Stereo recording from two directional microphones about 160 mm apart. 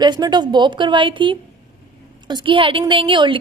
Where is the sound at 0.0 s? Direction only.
25° right (ahead or behind).